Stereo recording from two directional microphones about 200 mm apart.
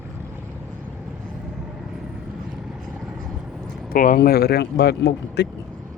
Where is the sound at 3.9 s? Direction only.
45° left (ahead or behind).